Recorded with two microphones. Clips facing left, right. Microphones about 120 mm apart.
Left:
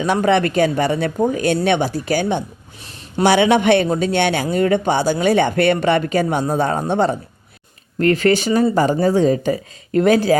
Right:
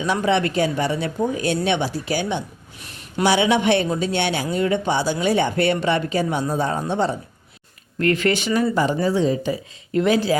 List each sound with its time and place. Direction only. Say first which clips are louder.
0.0 s speech: left 4 dB; 55° left (ahead or behind)
7.9 s speech: left 5 dB; 35° left (ahead or behind)